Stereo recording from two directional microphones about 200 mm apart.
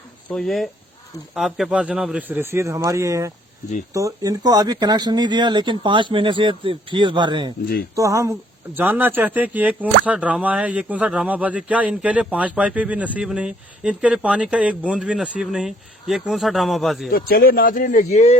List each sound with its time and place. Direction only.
0.3 s a man's voice: centre (ahead or behind)
17.1 s speech: 50° left (ahead or behind)